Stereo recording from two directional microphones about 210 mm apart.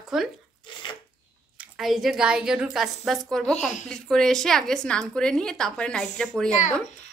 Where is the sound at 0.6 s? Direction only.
25° left (ahead or behind).